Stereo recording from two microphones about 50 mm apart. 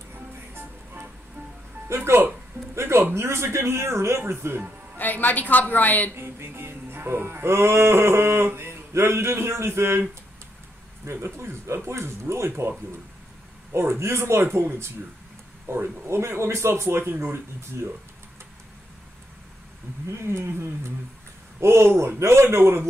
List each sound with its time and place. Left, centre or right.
1.9 s music: right
4.2 s speech: right
4.9 s a woman's voice: left
6.1 s music: right
11.2 s music: right
13.7 s music: right
17.3 s music: right
20.1 s music: right